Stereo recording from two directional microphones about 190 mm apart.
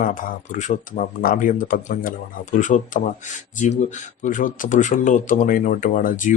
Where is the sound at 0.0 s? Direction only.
45° left (ahead or behind).